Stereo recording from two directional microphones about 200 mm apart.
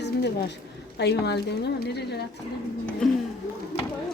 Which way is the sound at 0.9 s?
55° left (ahead or behind).